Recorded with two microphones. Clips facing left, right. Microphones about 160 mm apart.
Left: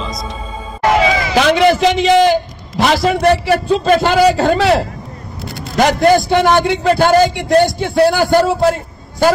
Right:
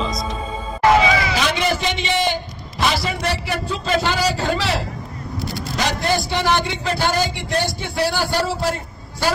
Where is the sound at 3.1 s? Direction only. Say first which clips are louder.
Left 11 dB; 60° left (ahead or behind).